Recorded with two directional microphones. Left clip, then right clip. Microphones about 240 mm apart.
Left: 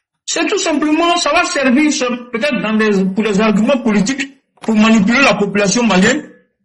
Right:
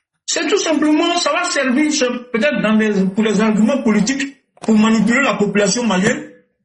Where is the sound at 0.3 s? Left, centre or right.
Left.